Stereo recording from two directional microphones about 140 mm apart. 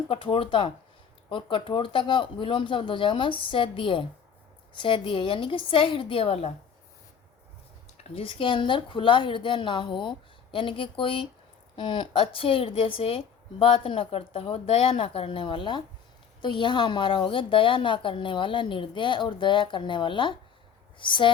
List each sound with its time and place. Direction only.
0.1 s a woman's voice: 40° left (ahead or behind)
8.1 s a woman's voice: 40° left (ahead or behind)